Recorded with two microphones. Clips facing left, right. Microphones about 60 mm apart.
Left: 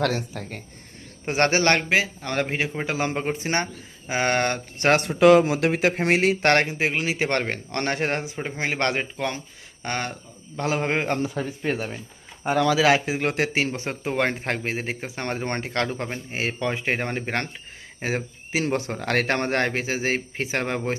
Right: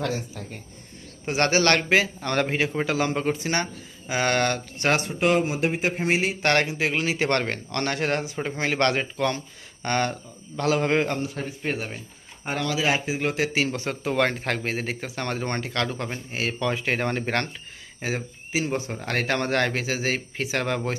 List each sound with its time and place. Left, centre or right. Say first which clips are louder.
0.0 s speech: left 4 dB; left
1.2 s a man's voice: left 1 dB; left
1.9 s speech: right 1 dB; centre
2.9 s speech: right 1 dB; left
4.8 s speech: left 4 dB; left
5.0 s speech: left 7 dB; left
6.4 s a man's voice: left 2 dB; left
6.9 s speech: even; centre; by 8.3 s left
8.4 s speech: right 2 dB; centre
12.8 s speech: left 4 dB; left; by 17.5 s centre
18.0 s speech: left 2 dB; left
18.6 s a man's voice: left 5 dB; left